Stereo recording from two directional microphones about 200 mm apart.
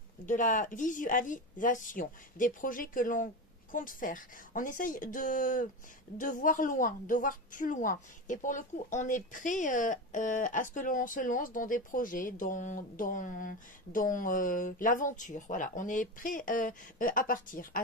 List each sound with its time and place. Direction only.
0.3 s a woman's voice: 40° left (ahead or behind)